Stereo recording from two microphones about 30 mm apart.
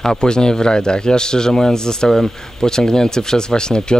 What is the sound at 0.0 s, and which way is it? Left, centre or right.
Speech, left.